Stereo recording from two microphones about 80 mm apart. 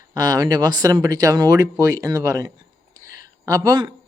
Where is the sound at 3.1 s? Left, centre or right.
Right.